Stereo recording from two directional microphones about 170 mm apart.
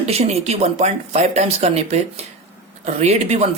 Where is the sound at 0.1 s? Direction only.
40° right (ahead or behind).